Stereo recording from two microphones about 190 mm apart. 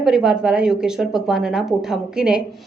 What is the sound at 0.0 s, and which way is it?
A woman's voice, 5° right (ahead or behind).